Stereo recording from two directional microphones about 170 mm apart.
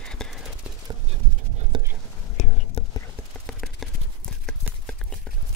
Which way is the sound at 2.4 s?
45° left (ahead or behind).